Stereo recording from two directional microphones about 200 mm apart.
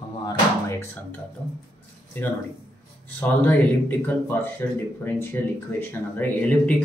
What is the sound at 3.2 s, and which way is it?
Speech, 10° left (ahead or behind).